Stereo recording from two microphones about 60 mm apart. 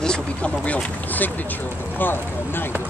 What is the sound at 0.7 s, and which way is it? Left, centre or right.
Speech, left.